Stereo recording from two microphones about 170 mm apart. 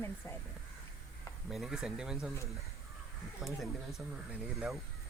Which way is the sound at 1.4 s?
Centre (ahead or behind).